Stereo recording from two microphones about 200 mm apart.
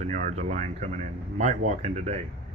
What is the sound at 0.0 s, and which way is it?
Speech, 35° right (ahead or behind).